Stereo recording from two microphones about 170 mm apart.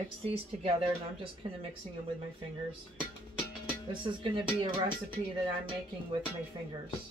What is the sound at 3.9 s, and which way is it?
Speech, 30° right (ahead or behind).